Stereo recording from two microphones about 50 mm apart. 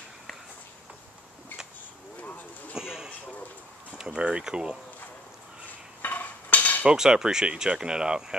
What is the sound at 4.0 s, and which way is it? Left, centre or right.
Speech, centre.